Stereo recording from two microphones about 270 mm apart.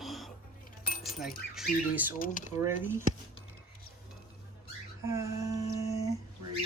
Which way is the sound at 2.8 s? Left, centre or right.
Centre.